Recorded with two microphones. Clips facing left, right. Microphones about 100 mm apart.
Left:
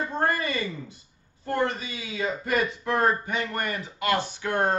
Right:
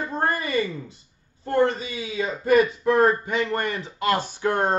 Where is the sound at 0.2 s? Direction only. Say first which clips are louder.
Right 3 dB; 25° right (ahead or behind).